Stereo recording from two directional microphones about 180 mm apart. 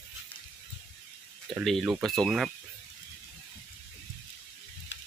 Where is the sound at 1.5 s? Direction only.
Centre (ahead or behind).